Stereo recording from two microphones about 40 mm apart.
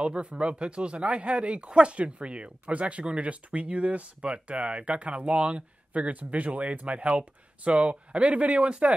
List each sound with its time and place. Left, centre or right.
0.0 s speech: right